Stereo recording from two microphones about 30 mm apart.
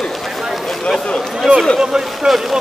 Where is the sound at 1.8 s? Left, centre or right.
Right.